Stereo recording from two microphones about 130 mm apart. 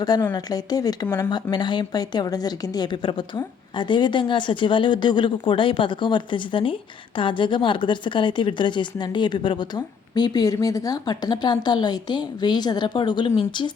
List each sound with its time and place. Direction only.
0.3 s speech: 30° left (ahead or behind)